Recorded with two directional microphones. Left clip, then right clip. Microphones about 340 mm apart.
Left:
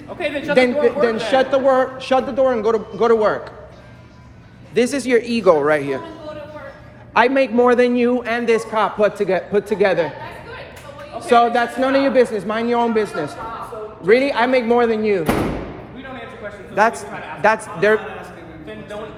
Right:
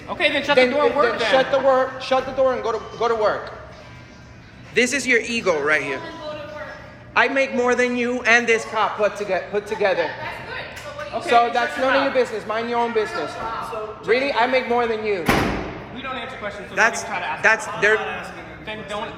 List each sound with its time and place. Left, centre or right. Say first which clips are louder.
0.2 s a man's voice: right 3 dB; right
0.5 s a man's voice: left 3 dB; centre
4.7 s a man's voice: left 2 dB; centre
7.1 s a man's voice: left 3 dB; centre
8.5 s a man's voice: left 3 dB; centre
11.3 s a man's voice: left 3 dB; centre
14.1 s a man's voice: left 4 dB; centre
17.4 s a man's voice: left 2 dB; centre